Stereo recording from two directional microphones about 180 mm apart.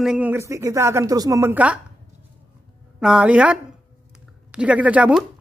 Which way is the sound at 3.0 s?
5° right (ahead or behind).